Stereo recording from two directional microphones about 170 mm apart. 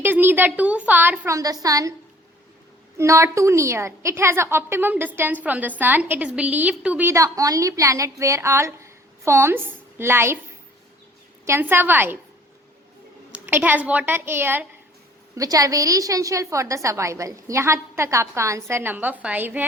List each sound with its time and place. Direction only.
0.0 s a woman's voice: 10° right (ahead or behind)
3.0 s a woman's voice: 15° right (ahead or behind)
11.4 s a woman's voice: 15° right (ahead or behind)
13.3 s a woman's voice: 10° right (ahead or behind)